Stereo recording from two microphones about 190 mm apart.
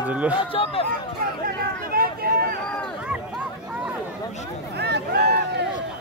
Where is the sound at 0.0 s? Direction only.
5° right (ahead or behind).